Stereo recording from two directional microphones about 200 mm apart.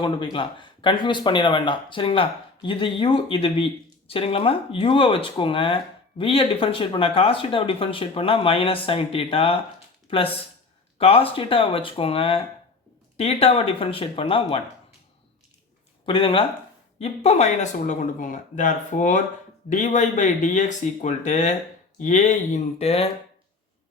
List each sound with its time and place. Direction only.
0.0 s speech: 25° left (ahead or behind)
16.0 s speech: 25° left (ahead or behind)